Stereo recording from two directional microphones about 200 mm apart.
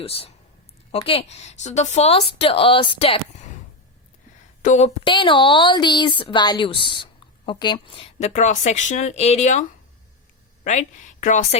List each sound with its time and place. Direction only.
0.0 s a woman's voice: 30° left (ahead or behind)
4.6 s speech: 35° left (ahead or behind)
5.0 s a woman's voice: 25° left (ahead or behind)